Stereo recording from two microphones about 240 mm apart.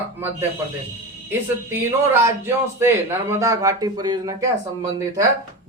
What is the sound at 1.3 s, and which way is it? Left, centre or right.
A man's voice, centre.